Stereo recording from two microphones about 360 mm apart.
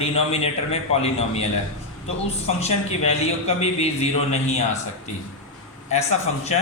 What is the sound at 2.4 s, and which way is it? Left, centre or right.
A man's voice, centre.